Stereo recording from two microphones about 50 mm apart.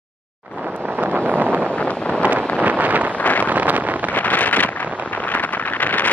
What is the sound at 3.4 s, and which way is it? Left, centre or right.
Vehicle, right.